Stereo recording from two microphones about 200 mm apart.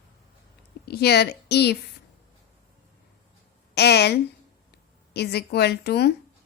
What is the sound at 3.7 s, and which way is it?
A woman's voice, 55° left (ahead or behind).